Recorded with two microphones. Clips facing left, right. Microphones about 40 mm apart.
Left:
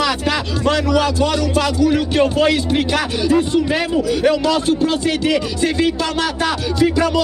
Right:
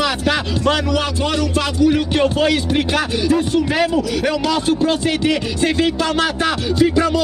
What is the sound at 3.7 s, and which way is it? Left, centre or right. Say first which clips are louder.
Speech: right 1 dB; centre.